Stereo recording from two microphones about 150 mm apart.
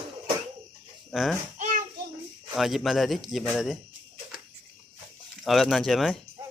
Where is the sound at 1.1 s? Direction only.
Centre (ahead or behind).